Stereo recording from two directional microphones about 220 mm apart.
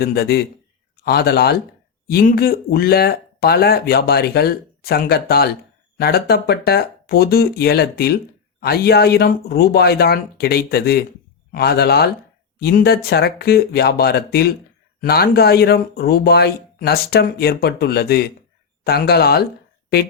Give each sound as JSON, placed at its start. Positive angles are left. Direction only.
{"t": 0.0, "sound": "speech", "side_deg": 45}